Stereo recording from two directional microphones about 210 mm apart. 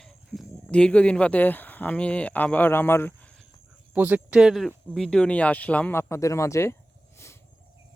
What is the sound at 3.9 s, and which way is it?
Speech, 10° right (ahead or behind).